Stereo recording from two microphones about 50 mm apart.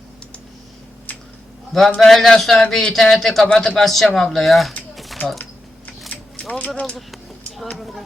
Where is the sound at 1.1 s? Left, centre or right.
Left.